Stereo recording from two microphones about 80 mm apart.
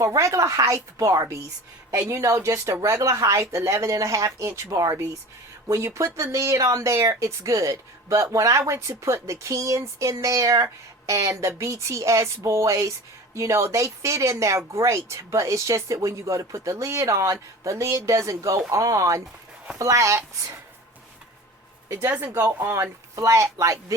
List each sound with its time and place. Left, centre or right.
0.0 s speech: right
22.6 s speech: right